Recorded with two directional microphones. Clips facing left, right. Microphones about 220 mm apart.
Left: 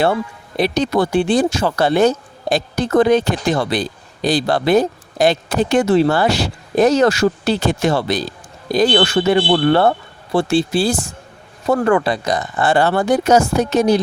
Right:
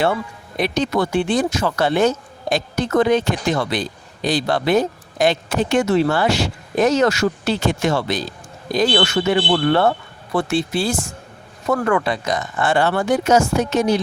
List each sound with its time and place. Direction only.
0.0 s speech: 35° left (ahead or behind)